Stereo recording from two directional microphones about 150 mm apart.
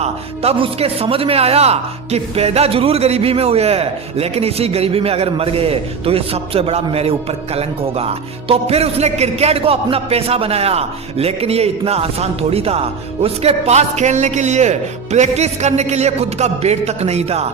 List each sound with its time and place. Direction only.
0.0 s a man's voice: 40° right (ahead or behind)